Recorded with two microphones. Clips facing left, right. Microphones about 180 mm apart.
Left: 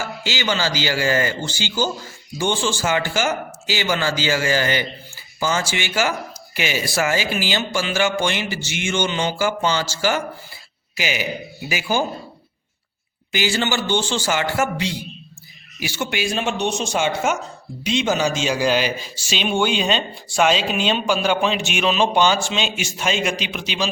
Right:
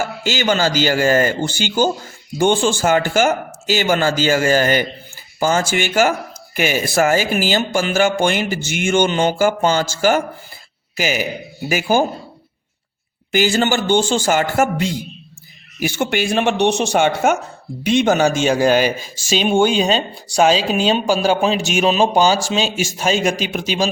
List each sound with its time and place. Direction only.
0.0 s speech: 50° right (ahead or behind)
13.3 s a man's voice: 50° right (ahead or behind)